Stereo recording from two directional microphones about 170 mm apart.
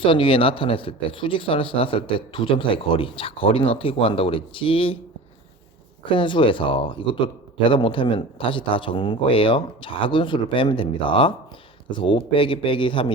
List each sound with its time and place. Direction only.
0.0 s speech: 30° left (ahead or behind)
6.1 s speech: 30° left (ahead or behind)